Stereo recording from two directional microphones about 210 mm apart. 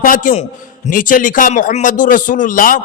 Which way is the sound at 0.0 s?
40° left (ahead or behind).